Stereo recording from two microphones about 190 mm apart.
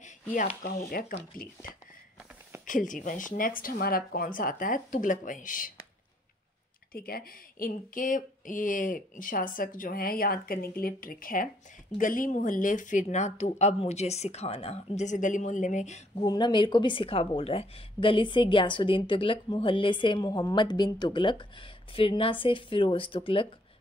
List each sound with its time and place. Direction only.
0.0 s a sound: 45° left (ahead or behind)
0.7 s speech: 45° left (ahead or behind)
6.9 s speech: 50° left (ahead or behind)
16.3 s a woman's voice: 25° left (ahead or behind)